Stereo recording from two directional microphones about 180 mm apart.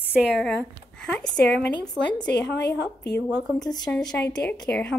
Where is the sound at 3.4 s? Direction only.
Centre (ahead or behind).